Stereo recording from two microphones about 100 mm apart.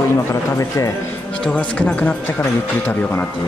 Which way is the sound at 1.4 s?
15° left (ahead or behind).